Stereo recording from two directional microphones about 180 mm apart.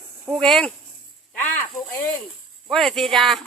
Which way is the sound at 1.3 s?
10° left (ahead or behind).